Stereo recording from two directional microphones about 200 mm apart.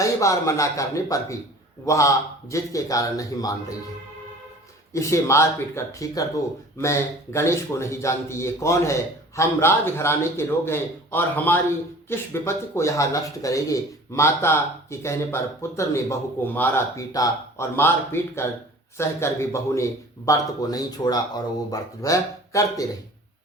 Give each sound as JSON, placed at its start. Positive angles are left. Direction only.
{"t": 0.0, "sound": "speech", "side_deg": 15}
{"t": 4.9, "sound": "speech", "side_deg": 15}